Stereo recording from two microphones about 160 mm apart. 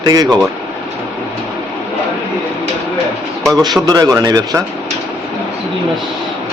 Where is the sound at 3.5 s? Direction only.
25° right (ahead or behind).